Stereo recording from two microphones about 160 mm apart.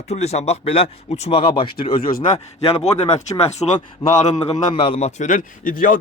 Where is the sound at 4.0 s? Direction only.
30° left (ahead or behind); by 5.9 s 60° left (ahead or behind).